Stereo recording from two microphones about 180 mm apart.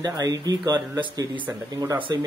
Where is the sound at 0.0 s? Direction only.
20° right (ahead or behind).